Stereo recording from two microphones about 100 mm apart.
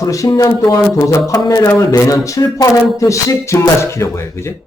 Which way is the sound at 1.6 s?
25° left (ahead or behind).